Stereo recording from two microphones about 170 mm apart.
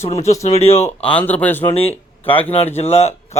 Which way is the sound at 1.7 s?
35° left (ahead or behind).